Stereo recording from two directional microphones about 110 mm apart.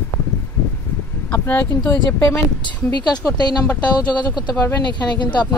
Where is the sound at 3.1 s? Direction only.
40° left (ahead or behind).